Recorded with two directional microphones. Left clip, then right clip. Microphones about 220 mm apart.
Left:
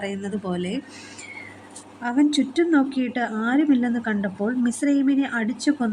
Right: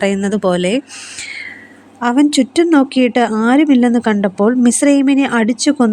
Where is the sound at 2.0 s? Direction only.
40° right (ahead or behind).